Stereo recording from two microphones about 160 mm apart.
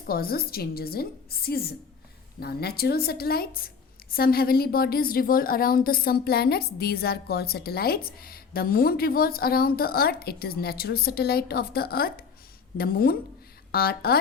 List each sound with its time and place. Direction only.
0.1 s a woman's voice: 70° left (ahead or behind)